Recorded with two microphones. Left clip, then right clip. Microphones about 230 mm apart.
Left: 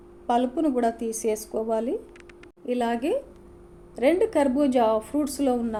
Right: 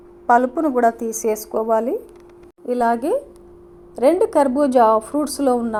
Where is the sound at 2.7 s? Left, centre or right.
Centre.